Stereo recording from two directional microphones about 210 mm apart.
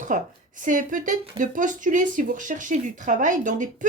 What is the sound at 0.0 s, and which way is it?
Speech, 40° right (ahead or behind).